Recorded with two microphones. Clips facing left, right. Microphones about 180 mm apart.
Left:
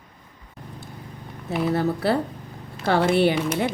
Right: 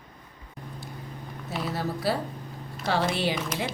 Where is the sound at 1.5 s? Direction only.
60° left (ahead or behind).